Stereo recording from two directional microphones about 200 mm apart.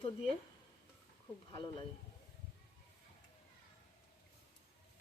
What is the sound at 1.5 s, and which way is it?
Speech, 25° left (ahead or behind).